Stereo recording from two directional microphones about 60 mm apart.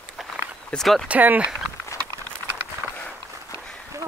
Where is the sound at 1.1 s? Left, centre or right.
Right.